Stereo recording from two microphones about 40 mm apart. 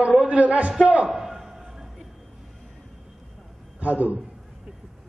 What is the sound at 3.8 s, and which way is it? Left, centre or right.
Speech, right.